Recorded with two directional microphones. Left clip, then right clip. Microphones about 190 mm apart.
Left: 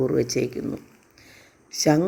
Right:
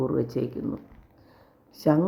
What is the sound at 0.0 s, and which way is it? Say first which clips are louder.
Speech: left 4 dB; 10° left (ahead or behind).